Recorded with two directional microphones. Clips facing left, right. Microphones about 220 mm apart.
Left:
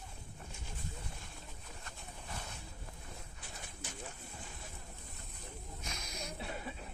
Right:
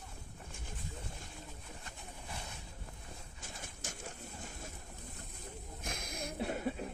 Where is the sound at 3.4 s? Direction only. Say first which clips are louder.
Right 1 dB; 45° right (ahead or behind).